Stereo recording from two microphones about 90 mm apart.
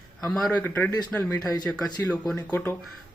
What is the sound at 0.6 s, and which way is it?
Speech, 20° left (ahead or behind).